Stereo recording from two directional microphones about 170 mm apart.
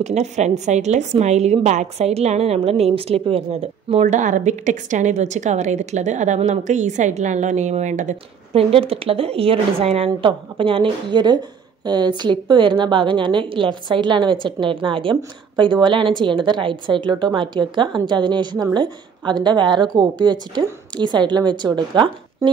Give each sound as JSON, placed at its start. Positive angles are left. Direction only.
{"t": 0.0, "sound": "a woman's voice", "side_deg": -40}
{"t": 3.9, "sound": "a woman's voice", "side_deg": -45}